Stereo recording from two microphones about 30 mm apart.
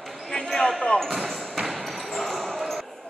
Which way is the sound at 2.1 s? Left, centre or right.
Centre.